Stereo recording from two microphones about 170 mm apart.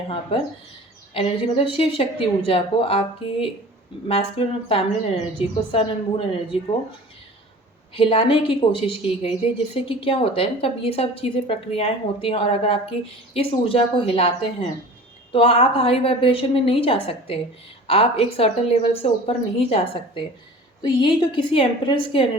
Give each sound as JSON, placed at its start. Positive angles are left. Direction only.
{"t": 0.1, "sound": "a woman's voice", "side_deg": 30}
{"t": 4.1, "sound": "a woman's voice", "side_deg": 35}
{"t": 7.9, "sound": "a woman's voice", "side_deg": 30}